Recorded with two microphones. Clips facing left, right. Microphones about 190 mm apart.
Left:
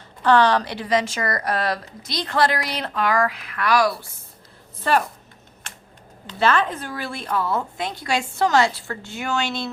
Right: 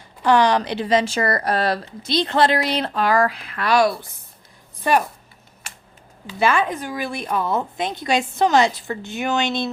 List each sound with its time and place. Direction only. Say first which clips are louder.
0.2 s speech: even; 15° right (ahead or behind)
6.2 s speech: right 1 dB; 10° right (ahead or behind)